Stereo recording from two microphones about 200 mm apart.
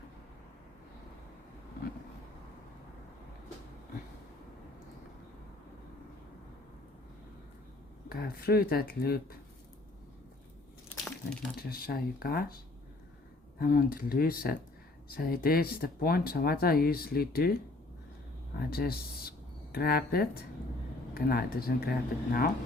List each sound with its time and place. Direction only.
8.1 s speech: 50° left (ahead or behind)
11.7 s speech: 50° left (ahead or behind)
13.6 s speech: 50° left (ahead or behind)
18.5 s speech: 50° left (ahead or behind)